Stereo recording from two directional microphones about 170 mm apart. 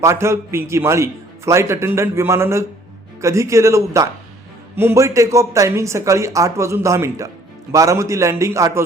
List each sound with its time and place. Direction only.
0.0 s a man's voice: 15° right (ahead or behind)